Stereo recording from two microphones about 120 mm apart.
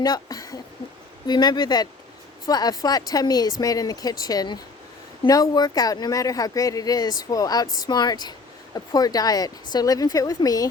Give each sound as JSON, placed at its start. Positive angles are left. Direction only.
{"t": 0.0, "sound": "speech", "side_deg": 30}